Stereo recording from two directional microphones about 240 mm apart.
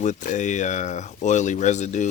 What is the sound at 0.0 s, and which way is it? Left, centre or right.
Speech, left.